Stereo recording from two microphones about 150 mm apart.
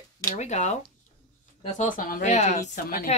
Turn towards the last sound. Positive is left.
turn(degrees=75)  # may be behind; listen again after turning